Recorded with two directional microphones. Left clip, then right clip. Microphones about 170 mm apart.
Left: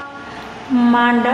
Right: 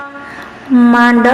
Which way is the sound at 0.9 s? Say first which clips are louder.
Right 5 dB; 30° right (ahead or behind).